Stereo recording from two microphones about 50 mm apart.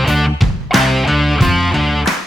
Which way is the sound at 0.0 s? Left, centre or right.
Centre.